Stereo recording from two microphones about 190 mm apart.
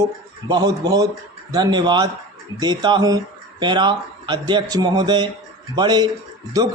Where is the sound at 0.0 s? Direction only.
20° right (ahead or behind).